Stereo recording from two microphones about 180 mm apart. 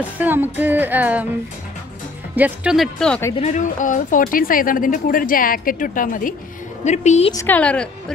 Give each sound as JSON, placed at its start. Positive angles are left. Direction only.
{"t": 0.2, "sound": "music", "side_deg": -10}
{"t": 2.3, "sound": "speech", "side_deg": -10}
{"t": 3.3, "sound": "a woman's voice", "side_deg": 40}
{"t": 7.3, "sound": "a woman's voice", "side_deg": 10}